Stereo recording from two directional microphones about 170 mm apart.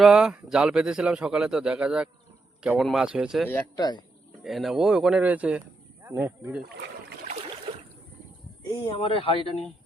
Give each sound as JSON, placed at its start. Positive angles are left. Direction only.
{"t": 0.0, "sound": "a man's voice", "side_deg": -5}
{"t": 3.5, "sound": "speech", "side_deg": 25}
{"t": 4.4, "sound": "speech", "side_deg": 0}
{"t": 6.6, "sound": "speech", "side_deg": -90}
{"t": 8.7, "sound": "speech", "side_deg": 35}